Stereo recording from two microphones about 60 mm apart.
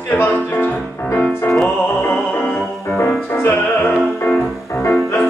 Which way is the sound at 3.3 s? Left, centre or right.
Left.